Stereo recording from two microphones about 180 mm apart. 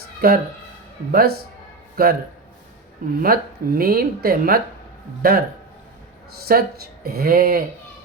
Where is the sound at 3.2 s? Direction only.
55° right (ahead or behind).